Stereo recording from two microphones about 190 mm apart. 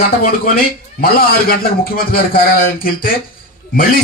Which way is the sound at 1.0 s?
50° left (ahead or behind).